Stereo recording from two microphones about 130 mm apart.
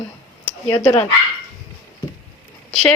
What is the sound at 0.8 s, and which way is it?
Speech, 20° left (ahead or behind).